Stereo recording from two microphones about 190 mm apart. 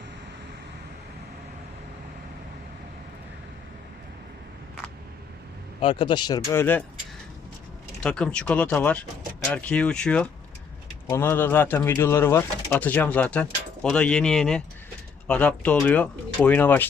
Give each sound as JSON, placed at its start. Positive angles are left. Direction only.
{"t": 5.8, "sound": "speech", "side_deg": 25}
{"t": 8.0, "sound": "speech", "side_deg": 5}